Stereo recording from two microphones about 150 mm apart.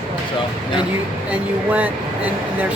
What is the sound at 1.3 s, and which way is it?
Speech, 10° right (ahead or behind).